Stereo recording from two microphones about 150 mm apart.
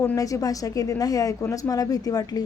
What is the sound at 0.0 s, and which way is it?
A woman's voice, 20° left (ahead or behind).